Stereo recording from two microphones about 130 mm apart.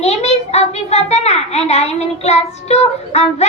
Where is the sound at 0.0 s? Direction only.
55° left (ahead or behind).